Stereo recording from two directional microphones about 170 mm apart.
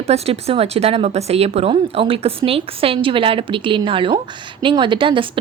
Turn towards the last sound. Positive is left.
turn(degrees=-30)  # may be behind; listen again after turning